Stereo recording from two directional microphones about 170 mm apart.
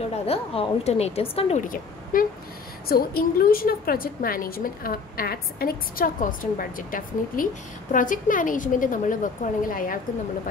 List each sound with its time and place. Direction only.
0.1 s a woman's voice: 40° left (ahead or behind)
2.1 s a woman's voice: 55° left (ahead or behind)